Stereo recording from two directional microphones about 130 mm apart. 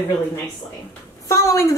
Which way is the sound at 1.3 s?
20° left (ahead or behind).